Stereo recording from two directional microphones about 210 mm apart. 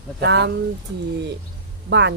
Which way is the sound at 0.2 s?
55° right (ahead or behind).